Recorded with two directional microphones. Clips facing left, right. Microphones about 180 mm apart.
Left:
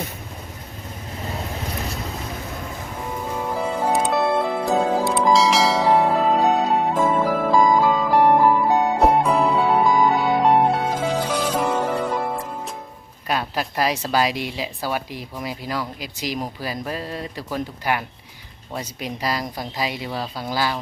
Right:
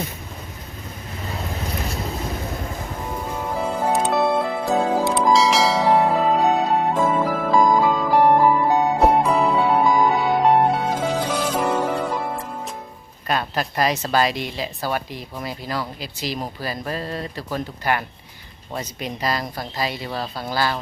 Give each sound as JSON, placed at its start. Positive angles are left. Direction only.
{"t": 3.3, "sound": "music", "side_deg": 0}
{"t": 13.2, "sound": "speech", "side_deg": 5}